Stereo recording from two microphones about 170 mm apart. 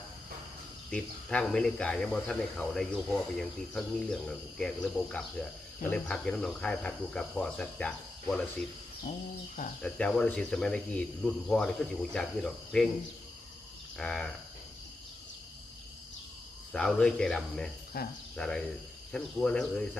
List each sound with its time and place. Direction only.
0.9 s speech: 5° left (ahead or behind)
9.8 s speech: 5° left (ahead or behind)
14.0 s speech: 5° left (ahead or behind)
16.7 s speech: 5° left (ahead or behind)
18.0 s cricket: 60° left (ahead or behind)
18.3 s speech: 5° left (ahead or behind)